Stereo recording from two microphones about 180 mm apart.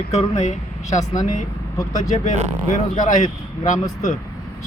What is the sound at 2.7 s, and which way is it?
Speech, 45° left (ahead or behind).